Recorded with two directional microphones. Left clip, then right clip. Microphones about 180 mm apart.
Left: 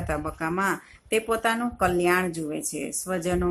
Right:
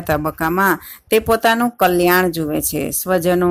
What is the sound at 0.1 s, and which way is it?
Speech, 45° right (ahead or behind).